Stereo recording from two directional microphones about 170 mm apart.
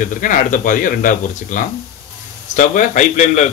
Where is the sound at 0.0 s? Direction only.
50° left (ahead or behind).